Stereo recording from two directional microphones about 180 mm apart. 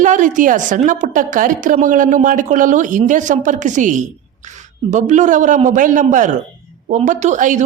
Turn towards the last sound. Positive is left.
turn(degrees=-45)  # may be behind; listen again after turning